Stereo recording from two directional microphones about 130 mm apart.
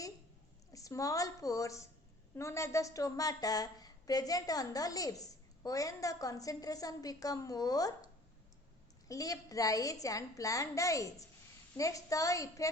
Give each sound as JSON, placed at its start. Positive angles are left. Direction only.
{"t": 0.7, "sound": "a woman's voice", "side_deg": 25}